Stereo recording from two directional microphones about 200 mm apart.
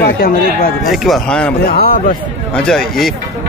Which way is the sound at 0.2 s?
45° left (ahead or behind).